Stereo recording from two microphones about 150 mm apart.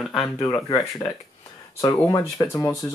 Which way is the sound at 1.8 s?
20° left (ahead or behind).